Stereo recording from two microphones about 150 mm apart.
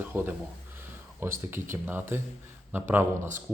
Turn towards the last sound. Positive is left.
turn(degrees=-15)  # may be behind; listen again after turning